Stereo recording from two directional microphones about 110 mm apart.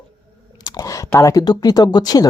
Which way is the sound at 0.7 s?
30° left (ahead or behind).